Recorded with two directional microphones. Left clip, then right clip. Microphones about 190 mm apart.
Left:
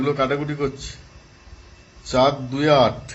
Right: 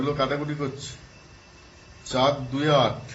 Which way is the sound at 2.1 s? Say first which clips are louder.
Left 4 dB; 45° left (ahead or behind).